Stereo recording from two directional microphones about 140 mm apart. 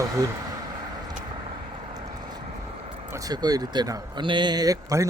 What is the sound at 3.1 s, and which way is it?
Speech, 25° right (ahead or behind).